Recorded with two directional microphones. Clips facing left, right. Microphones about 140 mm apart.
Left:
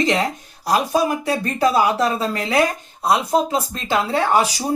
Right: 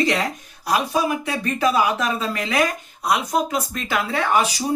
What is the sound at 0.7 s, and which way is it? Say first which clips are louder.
Speech: left 3 dB; 35° left (ahead or behind).